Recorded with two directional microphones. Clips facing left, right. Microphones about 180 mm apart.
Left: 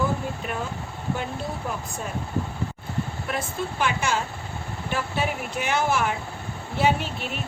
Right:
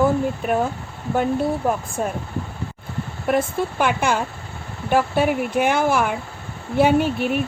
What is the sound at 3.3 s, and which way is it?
Speech, 55° right (ahead or behind).